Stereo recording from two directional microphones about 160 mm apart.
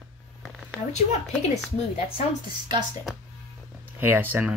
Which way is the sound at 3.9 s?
10° right (ahead or behind).